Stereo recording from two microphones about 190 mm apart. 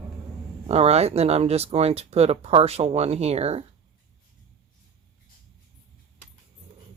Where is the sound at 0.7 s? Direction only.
35° right (ahead or behind).